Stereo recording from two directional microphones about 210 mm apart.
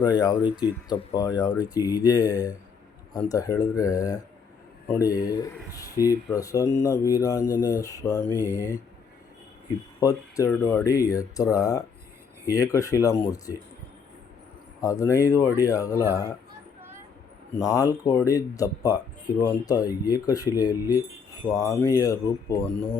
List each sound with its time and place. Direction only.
0.0 s speech: 20° left (ahead or behind)
10.0 s speech: 15° left (ahead or behind)
14.8 s speech: 15° left (ahead or behind)
15.9 s speech: 10° right (ahead or behind)
17.6 s speech: 15° left (ahead or behind)